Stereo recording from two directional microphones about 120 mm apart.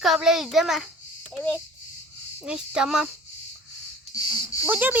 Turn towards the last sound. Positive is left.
turn(degrees=-15)  # may be behind; listen again after turning